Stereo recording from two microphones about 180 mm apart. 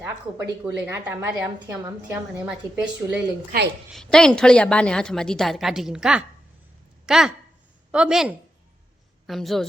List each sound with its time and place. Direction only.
0.6 s a woman's voice: 10° right (ahead or behind)
1.5 s a woman's voice: 20° right (ahead or behind)
2.0 s a woman's voice: 5° right (ahead or behind)